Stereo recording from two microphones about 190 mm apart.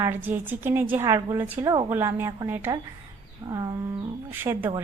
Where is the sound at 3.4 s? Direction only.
20° right (ahead or behind).